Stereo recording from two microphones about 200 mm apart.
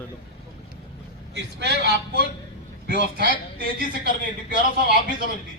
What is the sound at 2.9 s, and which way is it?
Speech, 50° right (ahead or behind).